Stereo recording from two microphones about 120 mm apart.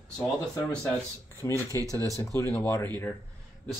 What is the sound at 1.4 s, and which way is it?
Speech, 30° left (ahead or behind).